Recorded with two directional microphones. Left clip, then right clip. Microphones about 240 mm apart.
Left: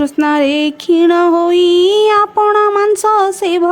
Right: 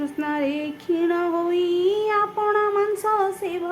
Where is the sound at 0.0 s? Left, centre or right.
Left.